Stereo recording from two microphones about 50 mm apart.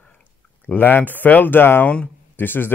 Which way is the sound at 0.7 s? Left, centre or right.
Left.